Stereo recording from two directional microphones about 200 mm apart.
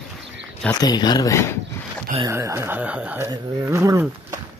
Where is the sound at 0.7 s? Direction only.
20° left (ahead or behind).